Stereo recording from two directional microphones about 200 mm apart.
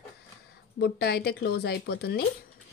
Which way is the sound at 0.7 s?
55° left (ahead or behind).